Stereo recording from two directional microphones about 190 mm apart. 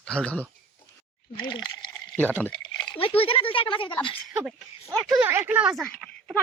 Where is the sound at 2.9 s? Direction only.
30° left (ahead or behind).